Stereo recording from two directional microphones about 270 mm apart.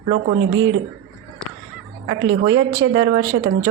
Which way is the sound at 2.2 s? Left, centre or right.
Right.